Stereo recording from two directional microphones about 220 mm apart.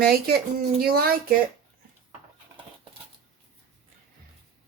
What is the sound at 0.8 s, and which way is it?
Speech, 45° right (ahead or behind).